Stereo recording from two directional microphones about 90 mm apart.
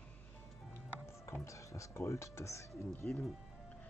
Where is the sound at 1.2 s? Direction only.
30° left (ahead or behind).